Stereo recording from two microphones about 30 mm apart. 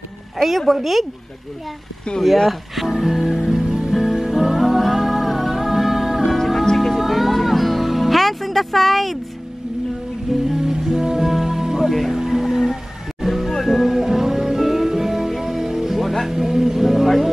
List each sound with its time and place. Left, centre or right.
0.7 s speech: centre
2.2 s speech: centre
2.8 s music: centre
3.6 s music: right
3.9 s music: centre
6.3 s music: centre
10.5 s music: centre
11.9 s music: centre
12.2 s music: centre
13.5 s music: centre
13.7 s music: centre
16.0 s music: centre
16.3 s music: centre